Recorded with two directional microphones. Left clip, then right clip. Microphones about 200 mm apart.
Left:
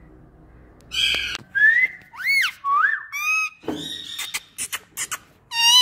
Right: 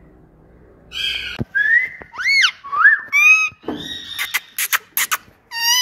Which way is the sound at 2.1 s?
25° left (ahead or behind).